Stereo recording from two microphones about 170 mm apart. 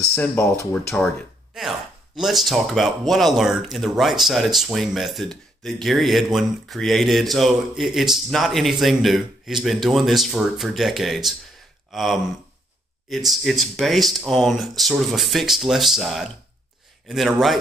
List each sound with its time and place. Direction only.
0.1 s speech: 15° left (ahead or behind)
1.5 s speech: centre (ahead or behind)